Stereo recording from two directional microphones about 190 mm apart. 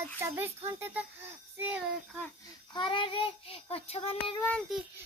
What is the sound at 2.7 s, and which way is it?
Child singing, 25° left (ahead or behind).